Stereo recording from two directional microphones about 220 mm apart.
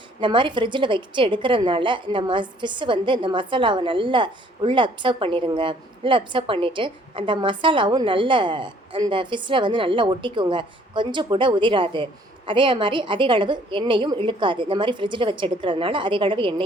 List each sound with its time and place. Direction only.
0.2 s a woman's voice: 20° right (ahead or behind)